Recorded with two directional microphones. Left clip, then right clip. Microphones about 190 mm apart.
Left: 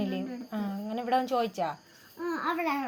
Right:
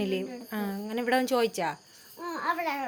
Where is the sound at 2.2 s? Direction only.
15° right (ahead or behind).